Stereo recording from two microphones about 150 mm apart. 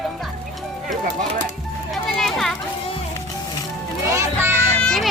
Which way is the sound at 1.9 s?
Centre (ahead or behind).